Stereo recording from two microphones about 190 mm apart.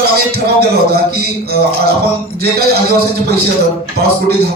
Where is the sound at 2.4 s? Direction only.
55° right (ahead or behind).